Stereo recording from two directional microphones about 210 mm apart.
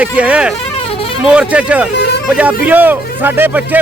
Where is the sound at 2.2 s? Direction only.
5° right (ahead or behind).